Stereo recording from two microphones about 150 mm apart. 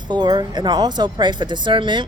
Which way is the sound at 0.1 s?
30° right (ahead or behind).